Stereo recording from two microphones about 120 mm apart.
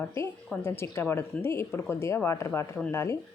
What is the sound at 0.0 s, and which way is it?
Speech, 20° left (ahead or behind).